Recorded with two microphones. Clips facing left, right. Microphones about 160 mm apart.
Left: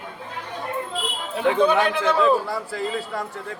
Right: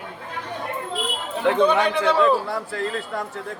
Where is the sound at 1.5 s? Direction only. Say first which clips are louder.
Even; 5° left (ahead or behind).